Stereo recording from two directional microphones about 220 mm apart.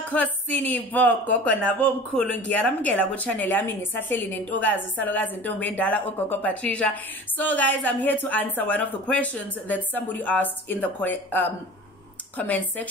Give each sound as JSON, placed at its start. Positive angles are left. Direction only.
{"t": 0.1, "sound": "speech", "side_deg": 5}